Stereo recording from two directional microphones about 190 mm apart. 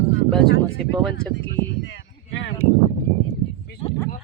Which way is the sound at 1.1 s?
65° left (ahead or behind).